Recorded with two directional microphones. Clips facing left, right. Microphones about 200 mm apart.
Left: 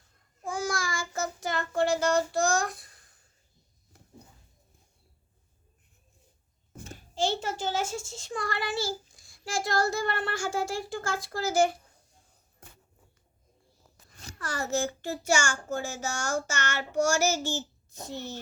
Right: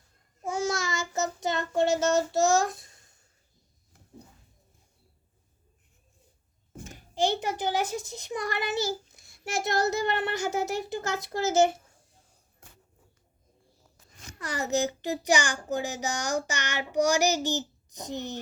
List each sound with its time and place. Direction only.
0.4 s child singing: 25° right (ahead or behind)
6.9 s a child's voice: 15° right (ahead or behind)
14.3 s a child's voice: 15° right (ahead or behind)